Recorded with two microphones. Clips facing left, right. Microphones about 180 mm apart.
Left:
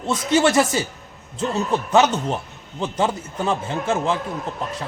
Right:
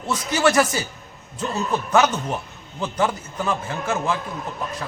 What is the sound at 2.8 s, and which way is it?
A man's voice, 25° left (ahead or behind).